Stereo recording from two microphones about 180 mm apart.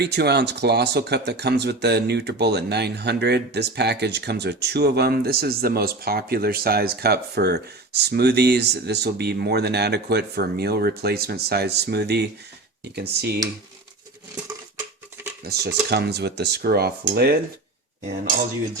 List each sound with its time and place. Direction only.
0.0 s speech: 70° right (ahead or behind)
15.4 s speech: 60° right (ahead or behind)